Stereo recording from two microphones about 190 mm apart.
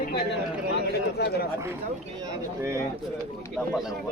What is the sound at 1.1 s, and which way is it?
Speech, 55° left (ahead or behind).